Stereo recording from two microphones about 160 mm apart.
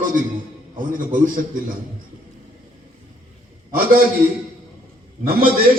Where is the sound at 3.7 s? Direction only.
65° right (ahead or behind).